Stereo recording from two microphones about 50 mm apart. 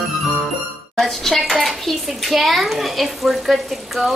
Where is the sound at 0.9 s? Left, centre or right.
Centre.